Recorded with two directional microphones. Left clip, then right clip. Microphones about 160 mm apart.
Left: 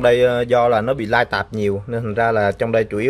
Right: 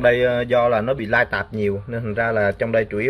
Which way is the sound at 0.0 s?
20° left (ahead or behind).